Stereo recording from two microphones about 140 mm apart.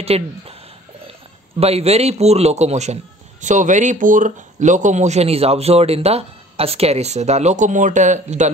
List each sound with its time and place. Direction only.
0.0 s speech: 45° right (ahead or behind)
1.6 s a man's voice: 45° right (ahead or behind)